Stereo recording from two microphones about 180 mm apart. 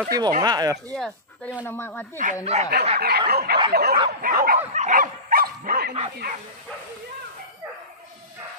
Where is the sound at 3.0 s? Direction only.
60° right (ahead or behind).